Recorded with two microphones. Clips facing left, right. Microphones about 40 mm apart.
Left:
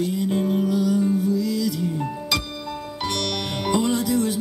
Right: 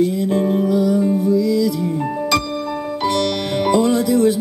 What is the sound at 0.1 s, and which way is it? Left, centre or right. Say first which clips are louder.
Music: right 5 dB; centre.